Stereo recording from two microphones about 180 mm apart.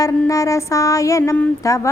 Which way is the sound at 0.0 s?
15° left (ahead or behind).